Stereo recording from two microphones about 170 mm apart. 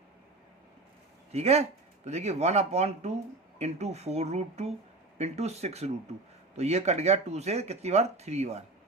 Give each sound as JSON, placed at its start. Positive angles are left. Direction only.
{"t": 1.3, "sound": "speech", "side_deg": -40}